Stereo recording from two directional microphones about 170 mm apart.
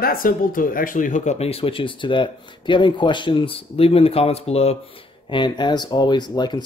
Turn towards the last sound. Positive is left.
turn(degrees=25)  # may be behind; listen again after turning